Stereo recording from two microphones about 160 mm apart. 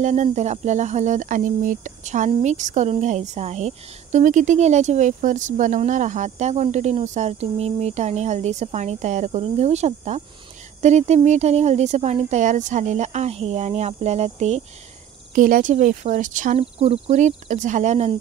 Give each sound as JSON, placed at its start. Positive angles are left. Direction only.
{"t": 0.0, "sound": "speech", "side_deg": -45}
{"t": 15.3, "sound": "speech", "side_deg": -55}